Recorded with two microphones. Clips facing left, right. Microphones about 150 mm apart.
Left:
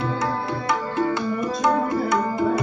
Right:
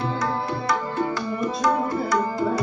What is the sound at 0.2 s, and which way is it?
Music, 25° left (ahead or behind).